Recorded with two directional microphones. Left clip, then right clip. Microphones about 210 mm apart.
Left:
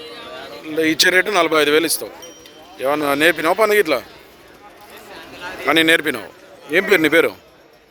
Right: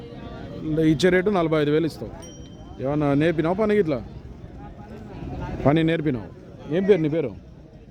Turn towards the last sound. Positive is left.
turn(degrees=15)  # may be behind; listen again after turning